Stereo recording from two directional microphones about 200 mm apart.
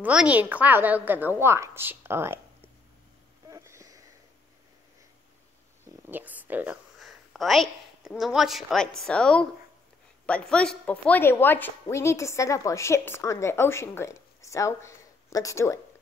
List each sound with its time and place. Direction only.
0.0 s a woman's voice: 5° right (ahead or behind)
3.4 s a sound: 15° right (ahead or behind)
6.0 s a woman's voice: 10° right (ahead or behind); by 15.8 s 15° left (ahead or behind)